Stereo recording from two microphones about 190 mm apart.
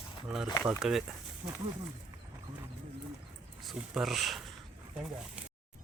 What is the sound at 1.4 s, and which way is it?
Speech, 25° right (ahead or behind).